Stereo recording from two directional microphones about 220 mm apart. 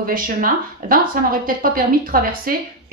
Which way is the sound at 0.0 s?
40° right (ahead or behind).